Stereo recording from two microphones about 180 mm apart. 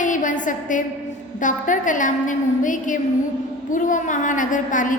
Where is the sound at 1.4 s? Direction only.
45° left (ahead or behind).